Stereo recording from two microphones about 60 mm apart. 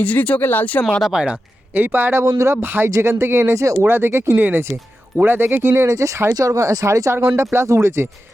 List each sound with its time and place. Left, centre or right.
0.0 s speech: left
1.1 s a man's voice: centre
1.7 s speech: right
3.8 s speech: right
6.3 s speech: right
7.1 s speech: right